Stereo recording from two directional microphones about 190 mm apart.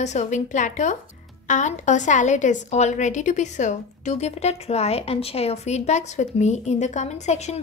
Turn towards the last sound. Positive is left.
turn(degrees=35)  # may be behind; listen again after turning